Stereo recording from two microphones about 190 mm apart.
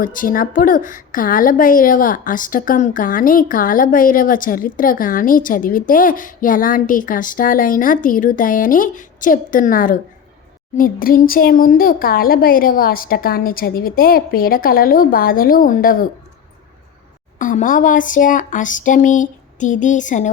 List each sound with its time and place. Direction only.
0.0 s a woman's voice: 45° left (ahead or behind)
17.3 s a woman's voice: 40° left (ahead or behind)